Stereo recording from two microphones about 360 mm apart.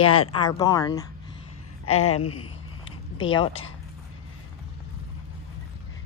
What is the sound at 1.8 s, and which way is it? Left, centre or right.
Speech, left.